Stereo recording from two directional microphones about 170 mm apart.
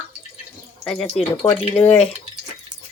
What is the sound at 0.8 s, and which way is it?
Speech, 5° left (ahead or behind).